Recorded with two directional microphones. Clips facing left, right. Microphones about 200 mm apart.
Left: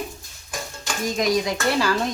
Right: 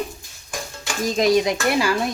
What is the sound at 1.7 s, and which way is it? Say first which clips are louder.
Speech: left 1 dB; 10° right (ahead or behind).